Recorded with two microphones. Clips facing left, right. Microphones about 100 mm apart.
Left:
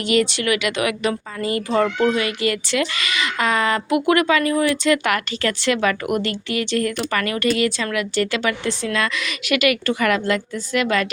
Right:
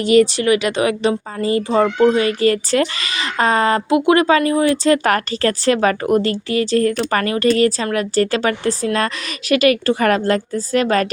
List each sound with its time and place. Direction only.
0.0 s speech: 35° right (ahead or behind)